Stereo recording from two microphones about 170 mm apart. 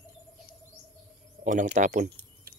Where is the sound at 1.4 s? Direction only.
50° right (ahead or behind).